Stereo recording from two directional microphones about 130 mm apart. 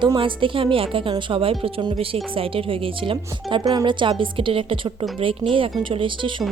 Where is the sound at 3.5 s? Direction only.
30° right (ahead or behind).